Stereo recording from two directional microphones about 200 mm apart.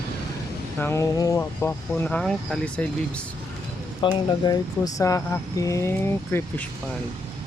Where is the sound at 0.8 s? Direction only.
15° left (ahead or behind).